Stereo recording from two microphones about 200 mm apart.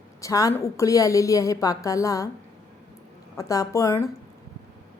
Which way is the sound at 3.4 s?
15° left (ahead or behind).